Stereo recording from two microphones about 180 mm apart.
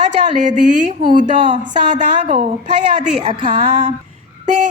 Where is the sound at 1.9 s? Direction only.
40° right (ahead or behind).